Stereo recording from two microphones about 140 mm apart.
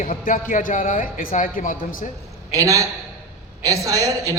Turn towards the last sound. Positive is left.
turn(degrees=-25)  # may be behind; listen again after turning